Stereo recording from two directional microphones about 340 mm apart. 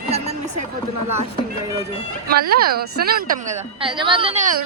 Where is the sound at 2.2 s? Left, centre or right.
Right.